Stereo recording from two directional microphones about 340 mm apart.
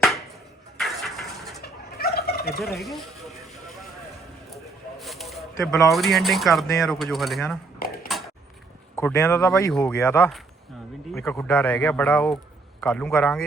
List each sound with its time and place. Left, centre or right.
0.8 s a sound: centre
1.6 s turkey: left
2.7 s speech: centre
4.5 s speech: centre
8.1 s a sound: centre
9.0 s speech: centre